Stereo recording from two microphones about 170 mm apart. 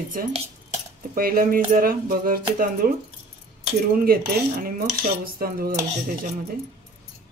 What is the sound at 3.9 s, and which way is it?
Speech, 60° right (ahead or behind).